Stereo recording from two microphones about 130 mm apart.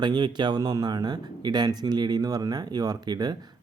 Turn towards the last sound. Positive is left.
turn(degrees=-30)  # may be behind; listen again after turning